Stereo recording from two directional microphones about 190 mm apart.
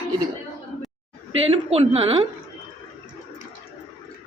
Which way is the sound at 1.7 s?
35° right (ahead or behind).